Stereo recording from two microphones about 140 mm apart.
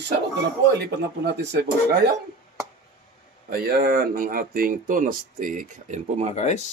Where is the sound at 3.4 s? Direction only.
90° right; by 6.2 s 60° right (ahead or behind).